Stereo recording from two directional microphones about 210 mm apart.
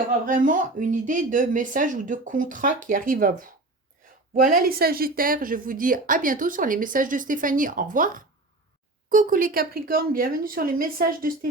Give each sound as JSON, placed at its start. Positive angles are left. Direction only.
{"t": 0.3, "sound": "a woman's voice", "side_deg": -40}